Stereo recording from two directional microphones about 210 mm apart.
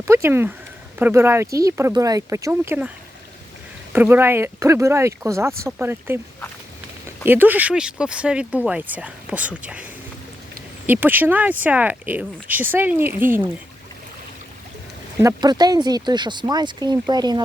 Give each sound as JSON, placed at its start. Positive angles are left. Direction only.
{"t": 0.0, "sound": "speech", "side_deg": -10}
{"t": 3.9, "sound": "speech", "side_deg": -10}
{"t": 7.3, "sound": "speech", "side_deg": -10}
{"t": 10.8, "sound": "speech", "side_deg": -10}
{"t": 15.2, "sound": "speech", "side_deg": -15}